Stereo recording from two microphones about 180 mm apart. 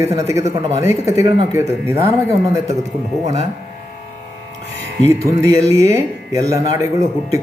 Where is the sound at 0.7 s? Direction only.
15° right (ahead or behind).